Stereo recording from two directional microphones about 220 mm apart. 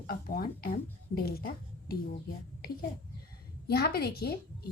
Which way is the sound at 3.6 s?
45° left (ahead or behind).